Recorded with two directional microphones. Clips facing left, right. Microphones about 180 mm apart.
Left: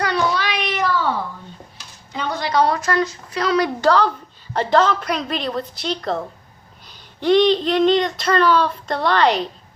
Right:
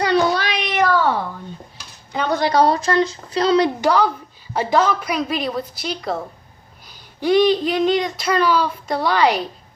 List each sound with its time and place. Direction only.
0.3 s a sound: 45° right (ahead or behind)
2.1 s speech: 40° right (ahead or behind)
3.8 s speech: 15° right (ahead or behind)